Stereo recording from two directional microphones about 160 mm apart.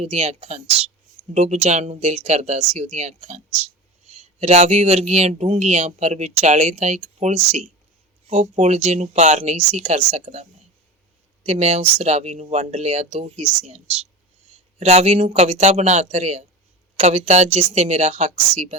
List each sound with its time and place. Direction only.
0.0 s a woman's voice: 40° right (ahead or behind)
11.4 s a woman's voice: 40° right (ahead or behind)